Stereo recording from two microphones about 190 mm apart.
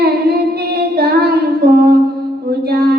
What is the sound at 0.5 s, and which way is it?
Child singing, 55° right (ahead or behind).